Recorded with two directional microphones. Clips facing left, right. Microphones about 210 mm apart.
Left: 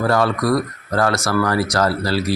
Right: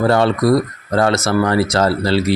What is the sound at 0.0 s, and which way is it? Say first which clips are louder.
Speech: right 4 dB; 25° right (ahead or behind).